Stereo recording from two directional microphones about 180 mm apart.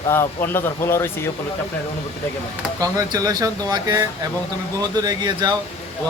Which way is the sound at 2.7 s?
20° right (ahead or behind).